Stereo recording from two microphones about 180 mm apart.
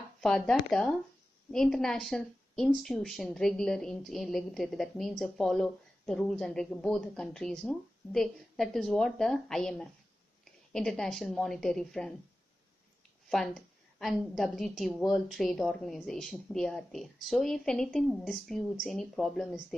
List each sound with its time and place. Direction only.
0.2 s speech: 5° left (ahead or behind)
13.3 s speech: 5° left (ahead or behind)